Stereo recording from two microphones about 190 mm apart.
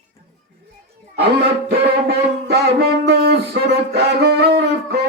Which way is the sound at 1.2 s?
60° right (ahead or behind).